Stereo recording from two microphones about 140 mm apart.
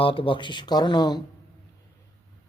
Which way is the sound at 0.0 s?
40° left (ahead or behind).